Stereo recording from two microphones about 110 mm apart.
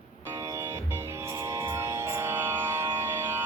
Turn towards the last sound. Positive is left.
turn(degrees=-20)  # may be behind; listen again after turning